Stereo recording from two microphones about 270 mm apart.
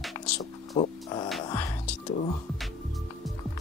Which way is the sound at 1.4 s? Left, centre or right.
Centre.